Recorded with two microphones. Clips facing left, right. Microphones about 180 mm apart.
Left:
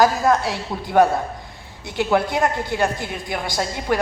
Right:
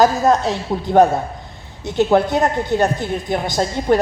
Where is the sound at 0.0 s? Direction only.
20° right (ahead or behind).